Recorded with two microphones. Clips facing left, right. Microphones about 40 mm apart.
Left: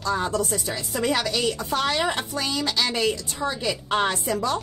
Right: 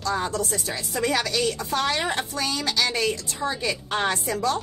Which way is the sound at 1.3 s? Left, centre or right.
Left.